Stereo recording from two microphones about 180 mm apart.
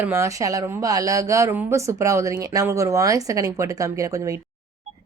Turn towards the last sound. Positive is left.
turn(degrees=-20)  # may be behind; listen again after turning